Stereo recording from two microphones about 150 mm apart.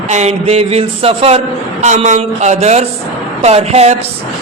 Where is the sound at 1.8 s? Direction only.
50° right (ahead or behind).